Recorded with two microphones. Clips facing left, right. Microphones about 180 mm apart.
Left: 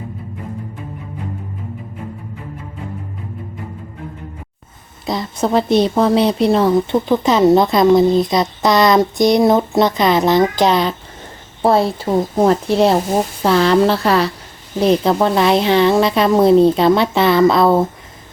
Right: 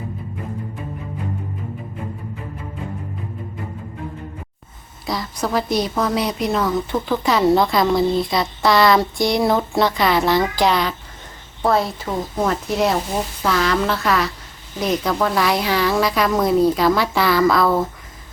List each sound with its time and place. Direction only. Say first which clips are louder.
5.0 s a woman's voice: left 5 dB; 25° left (ahead or behind)